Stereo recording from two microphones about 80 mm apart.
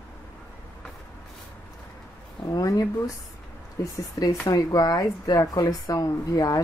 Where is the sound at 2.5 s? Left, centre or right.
Left.